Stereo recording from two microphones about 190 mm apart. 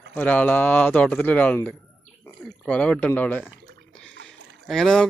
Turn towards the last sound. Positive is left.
turn(degrees=5)  # may be behind; listen again after turning